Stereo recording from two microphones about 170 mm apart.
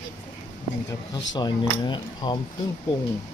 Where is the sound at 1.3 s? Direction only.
25° left (ahead or behind).